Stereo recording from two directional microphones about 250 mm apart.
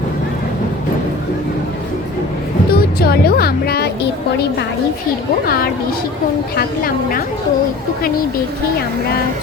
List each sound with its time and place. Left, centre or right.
2.7 s speech: left
6.6 s a woman's voice: left